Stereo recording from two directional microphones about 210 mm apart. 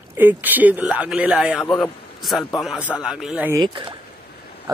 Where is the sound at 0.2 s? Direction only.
10° right (ahead or behind).